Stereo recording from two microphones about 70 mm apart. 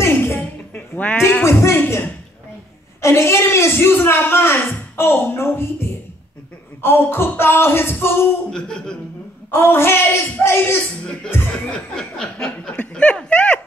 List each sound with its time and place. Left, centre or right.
0.0 s a sound: left
1.4 s a man's voice: left
3.0 s a man's voice: left
8.5 s speech: centre
9.5 s a man's voice: left
11.6 s speech: centre
12.4 s speech: centre